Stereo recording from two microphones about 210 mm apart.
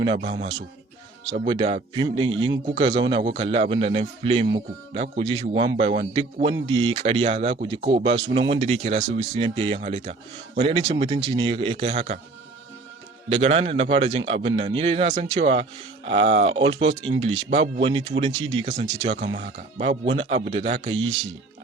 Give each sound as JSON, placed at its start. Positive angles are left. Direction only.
{"t": 1.3, "sound": "a man's voice", "side_deg": -25}
{"t": 13.3, "sound": "a man's voice", "side_deg": -30}